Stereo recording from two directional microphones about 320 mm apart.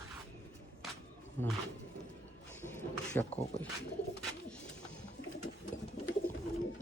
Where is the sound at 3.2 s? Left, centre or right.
Centre.